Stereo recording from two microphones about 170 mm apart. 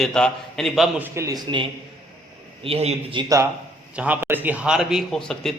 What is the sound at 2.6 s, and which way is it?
Speech, 35° right (ahead or behind).